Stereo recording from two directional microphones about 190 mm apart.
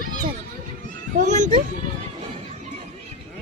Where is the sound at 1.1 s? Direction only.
40° right (ahead or behind).